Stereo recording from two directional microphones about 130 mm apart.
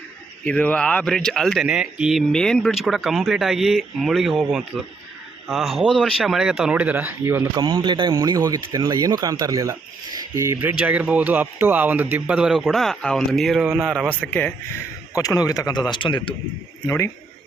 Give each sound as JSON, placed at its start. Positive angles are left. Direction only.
{"t": 0.4, "sound": "speech", "side_deg": 10}
{"t": 7.5, "sound": "a man's voice", "side_deg": -30}
{"t": 14.2, "sound": "a man's voice", "side_deg": 10}
{"t": 15.1, "sound": "a man's voice", "side_deg": 30}
{"t": 16.8, "sound": "a man's voice", "side_deg": 20}